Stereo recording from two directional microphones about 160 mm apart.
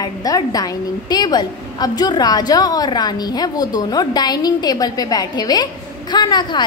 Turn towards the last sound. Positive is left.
turn(degrees=25)  # may be behind; listen again after turning